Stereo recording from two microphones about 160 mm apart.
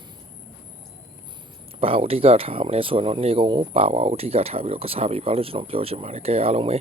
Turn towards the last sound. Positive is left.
turn(degrees=-40)  # may be behind; listen again after turning